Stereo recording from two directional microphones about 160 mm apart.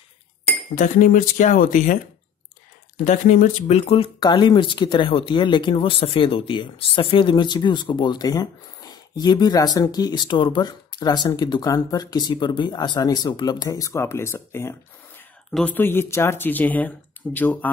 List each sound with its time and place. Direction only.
0.7 s speech: 55° left (ahead or behind)
3.1 s speech: 55° left (ahead or behind); by 17.6 s 10° left (ahead or behind)